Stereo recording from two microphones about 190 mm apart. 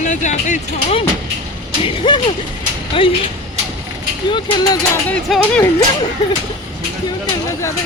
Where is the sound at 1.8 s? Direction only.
25° left (ahead or behind).